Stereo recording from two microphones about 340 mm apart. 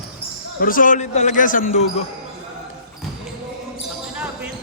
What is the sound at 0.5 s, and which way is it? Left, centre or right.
Speech, left.